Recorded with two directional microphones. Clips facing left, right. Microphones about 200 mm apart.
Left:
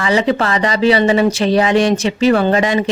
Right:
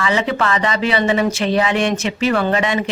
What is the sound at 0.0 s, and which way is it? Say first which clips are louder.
Speech: left 4 dB; 35° left (ahead or behind).